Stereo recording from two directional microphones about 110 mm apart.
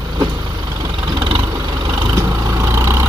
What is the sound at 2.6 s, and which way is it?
Vehicle, 25° right (ahead or behind).